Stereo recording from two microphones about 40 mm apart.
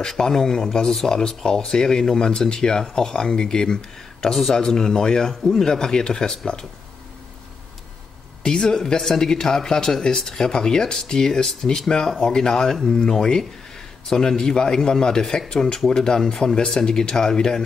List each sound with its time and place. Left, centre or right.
0.2 s speech: centre
4.3 s speech: centre
4.6 s speech: centre
8.4 s speech: centre